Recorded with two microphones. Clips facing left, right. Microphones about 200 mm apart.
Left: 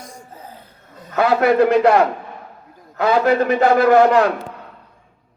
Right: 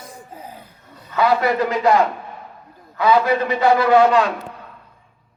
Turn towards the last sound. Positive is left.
turn(degrees=50)  # may be behind; listen again after turning